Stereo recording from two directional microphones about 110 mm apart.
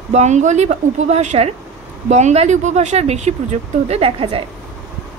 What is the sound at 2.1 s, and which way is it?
Speech, 90° right.